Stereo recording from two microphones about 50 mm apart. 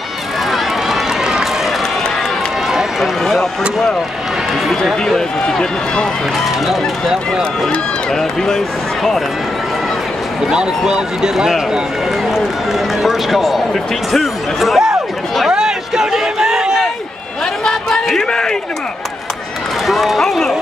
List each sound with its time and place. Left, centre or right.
0.5 s run: centre
2.7 s run: centre
5.5 s speech: centre
6.4 s a man's voice: centre
10.9 s a man's voice: centre
15.5 s a sound: centre
17.6 s a sound: centre
19.9 s a man's voice: centre